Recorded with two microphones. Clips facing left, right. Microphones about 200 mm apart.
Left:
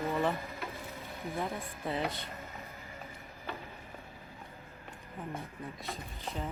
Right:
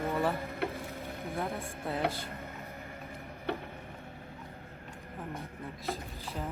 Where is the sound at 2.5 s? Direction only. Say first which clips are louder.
Right 3 dB; 55° right (ahead or behind).